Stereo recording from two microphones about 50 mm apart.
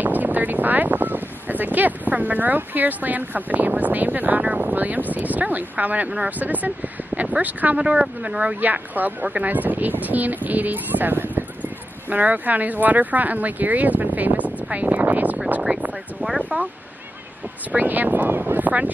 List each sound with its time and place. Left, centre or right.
0.0 s speech: right
15.7 s a sound: right
17.6 s speech: right